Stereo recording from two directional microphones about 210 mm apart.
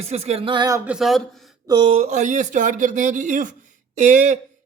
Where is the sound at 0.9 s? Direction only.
Centre (ahead or behind).